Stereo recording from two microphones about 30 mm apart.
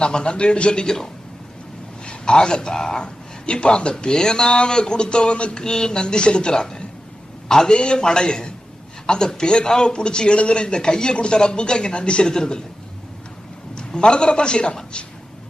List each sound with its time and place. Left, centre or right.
0.0 s speech: left
2.0 s a man's voice: left
3.0 s a man's voice: left; by 7.8 s centre
7.8 s speech: left
10.8 s speech: left
12.3 s speech: left
13.7 s a man's voice: left